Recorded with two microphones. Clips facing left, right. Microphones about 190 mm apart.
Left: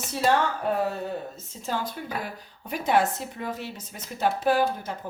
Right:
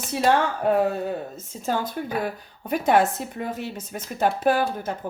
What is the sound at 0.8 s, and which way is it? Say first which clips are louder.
Speech: right 4 dB; 55° right (ahead or behind).